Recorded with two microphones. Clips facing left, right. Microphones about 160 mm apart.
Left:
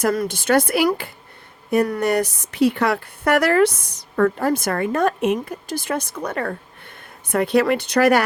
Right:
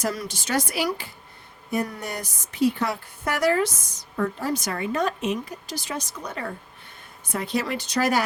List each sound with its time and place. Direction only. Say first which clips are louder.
0.0 s speech: left 8 dB; 55° left (ahead or behind)